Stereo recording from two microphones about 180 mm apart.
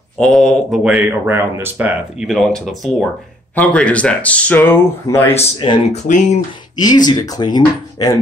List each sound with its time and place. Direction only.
0.2 s speech: 5° left (ahead or behind)
2.2 s speech: centre (ahead or behind)
6.0 s speech: 40° left (ahead or behind)
6.8 s speech: 20° left (ahead or behind)